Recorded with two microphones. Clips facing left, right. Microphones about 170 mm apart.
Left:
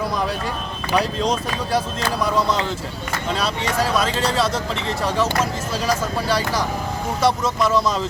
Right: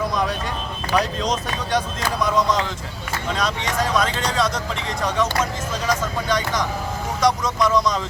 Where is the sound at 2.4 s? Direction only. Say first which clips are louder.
Even; 30° left (ahead or behind).